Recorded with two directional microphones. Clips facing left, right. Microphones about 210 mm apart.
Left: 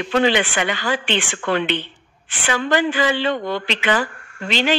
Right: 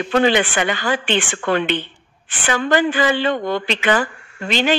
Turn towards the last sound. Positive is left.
turn(degrees=-45)  # may be behind; listen again after turning